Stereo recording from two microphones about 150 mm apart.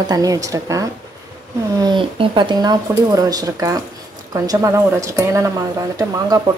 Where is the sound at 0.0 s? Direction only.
25° right (ahead or behind).